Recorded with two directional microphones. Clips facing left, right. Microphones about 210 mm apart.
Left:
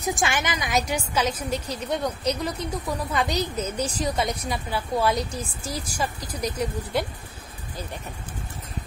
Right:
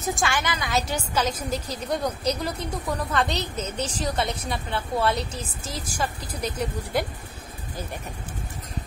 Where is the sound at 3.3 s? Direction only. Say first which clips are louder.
Left 3 dB; 5° left (ahead or behind).